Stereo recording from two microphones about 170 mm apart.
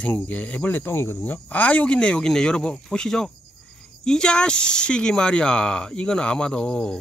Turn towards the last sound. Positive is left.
turn(degrees=5)  # may be behind; listen again after turning